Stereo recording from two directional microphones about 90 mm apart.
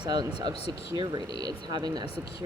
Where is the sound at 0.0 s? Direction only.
50° right (ahead or behind).